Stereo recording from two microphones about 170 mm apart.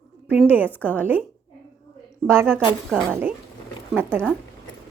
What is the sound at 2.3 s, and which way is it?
Speech, 15° right (ahead or behind).